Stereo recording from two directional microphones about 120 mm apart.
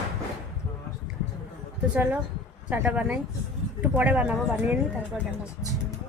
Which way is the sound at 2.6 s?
15° right (ahead or behind).